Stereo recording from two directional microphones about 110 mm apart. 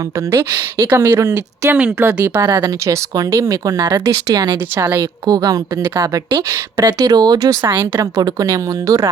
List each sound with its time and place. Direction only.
0.3 s a woman's voice: 30° right (ahead or behind)